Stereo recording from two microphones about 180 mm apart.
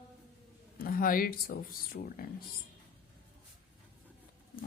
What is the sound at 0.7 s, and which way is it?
Speech, 55° left (ahead or behind).